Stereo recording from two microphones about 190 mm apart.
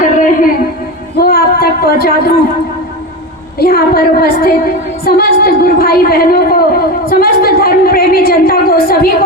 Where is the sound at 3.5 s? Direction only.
55° left (ahead or behind).